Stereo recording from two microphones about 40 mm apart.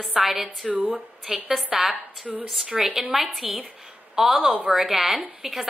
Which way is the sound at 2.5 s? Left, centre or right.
Centre.